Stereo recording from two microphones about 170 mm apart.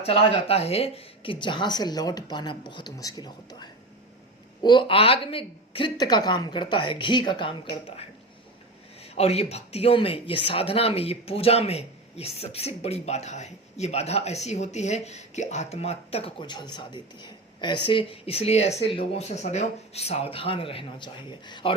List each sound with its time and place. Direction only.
0.0 s speech: 35° left (ahead or behind)
9.1 s speech: 35° left (ahead or behind)